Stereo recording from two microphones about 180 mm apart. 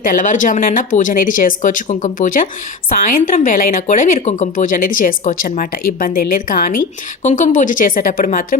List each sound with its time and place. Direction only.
0.0 s speech: 50° left (ahead or behind)